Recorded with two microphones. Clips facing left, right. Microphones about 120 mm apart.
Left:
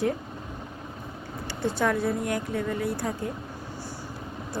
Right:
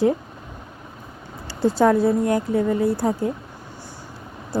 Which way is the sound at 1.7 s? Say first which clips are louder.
Right 9 dB; 30° right (ahead or behind).